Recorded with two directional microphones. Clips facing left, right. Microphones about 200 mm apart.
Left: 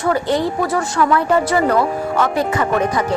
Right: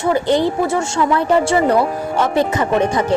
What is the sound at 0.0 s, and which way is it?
Speech, 25° right (ahead or behind).